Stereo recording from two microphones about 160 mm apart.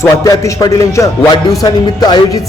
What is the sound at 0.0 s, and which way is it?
A man's voice, 20° left (ahead or behind).